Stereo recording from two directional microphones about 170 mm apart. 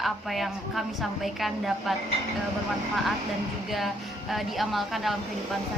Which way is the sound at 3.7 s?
Centre (ahead or behind).